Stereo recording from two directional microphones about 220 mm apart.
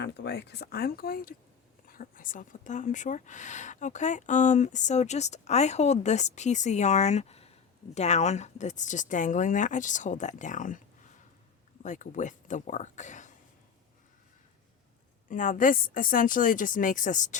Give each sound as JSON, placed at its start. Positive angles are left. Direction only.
{"t": 0.0, "sound": "speech", "side_deg": 50}
{"t": 11.8, "sound": "speech", "side_deg": 35}
{"t": 15.3, "sound": "speech", "side_deg": 35}